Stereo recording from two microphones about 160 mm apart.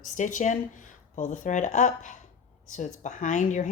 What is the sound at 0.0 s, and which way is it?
Speech, 50° left (ahead or behind).